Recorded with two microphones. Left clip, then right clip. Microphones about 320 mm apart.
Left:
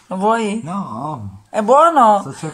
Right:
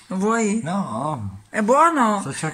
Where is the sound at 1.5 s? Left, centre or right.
Centre.